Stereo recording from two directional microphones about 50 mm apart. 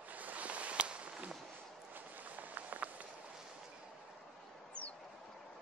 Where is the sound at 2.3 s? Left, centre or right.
Right.